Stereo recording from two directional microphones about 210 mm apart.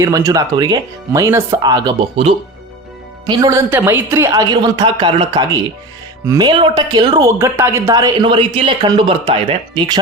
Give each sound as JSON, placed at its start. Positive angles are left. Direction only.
{"t": 0.0, "sound": "a woman's voice", "side_deg": -15}